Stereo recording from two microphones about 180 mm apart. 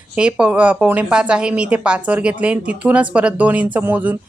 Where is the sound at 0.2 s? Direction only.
5° right (ahead or behind).